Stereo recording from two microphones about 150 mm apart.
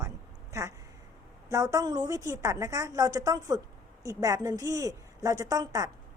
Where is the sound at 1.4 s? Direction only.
20° right (ahead or behind).